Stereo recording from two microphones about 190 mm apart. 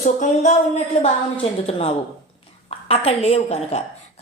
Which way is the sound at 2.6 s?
30° left (ahead or behind).